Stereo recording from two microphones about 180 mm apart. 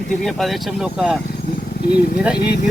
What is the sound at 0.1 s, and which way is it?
Speech, centre (ahead or behind).